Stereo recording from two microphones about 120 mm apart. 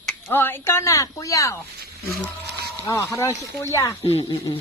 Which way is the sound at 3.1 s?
25° left (ahead or behind).